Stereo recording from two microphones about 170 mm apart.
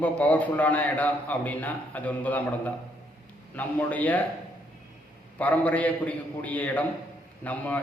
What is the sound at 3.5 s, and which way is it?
Speech, 10° left (ahead or behind).